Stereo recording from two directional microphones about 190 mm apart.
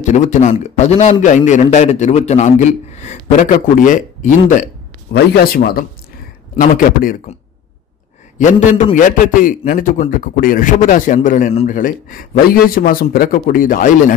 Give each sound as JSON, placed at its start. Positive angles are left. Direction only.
{"t": 0.0, "sound": "a man's voice", "side_deg": 40}
{"t": 5.1, "sound": "a man's voice", "side_deg": 50}
{"t": 8.4, "sound": "a man's voice", "side_deg": 40}